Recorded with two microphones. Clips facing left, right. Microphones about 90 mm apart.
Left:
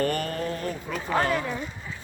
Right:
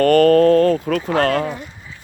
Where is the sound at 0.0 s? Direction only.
75° right (ahead or behind).